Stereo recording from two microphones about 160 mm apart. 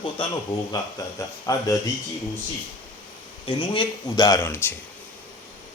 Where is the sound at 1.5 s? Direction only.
20° left (ahead or behind).